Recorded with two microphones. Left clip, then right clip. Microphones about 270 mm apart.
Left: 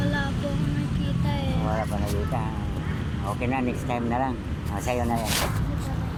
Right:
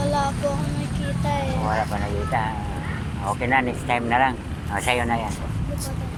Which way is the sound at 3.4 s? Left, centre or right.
Right.